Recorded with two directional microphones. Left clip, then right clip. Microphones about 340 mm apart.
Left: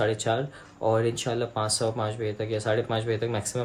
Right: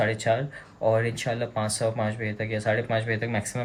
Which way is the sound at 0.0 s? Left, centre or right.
Centre.